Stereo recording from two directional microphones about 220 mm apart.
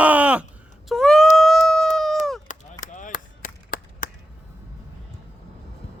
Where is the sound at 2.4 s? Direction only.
35° left (ahead or behind).